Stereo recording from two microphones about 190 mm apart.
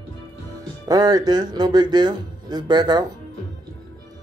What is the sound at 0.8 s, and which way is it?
Speech, 20° right (ahead or behind).